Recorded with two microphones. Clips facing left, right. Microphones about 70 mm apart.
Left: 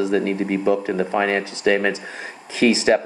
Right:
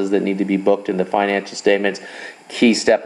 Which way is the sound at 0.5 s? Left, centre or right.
Right.